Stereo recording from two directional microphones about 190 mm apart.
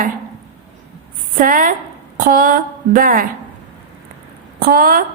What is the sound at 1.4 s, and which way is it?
Speech, 45° right (ahead or behind).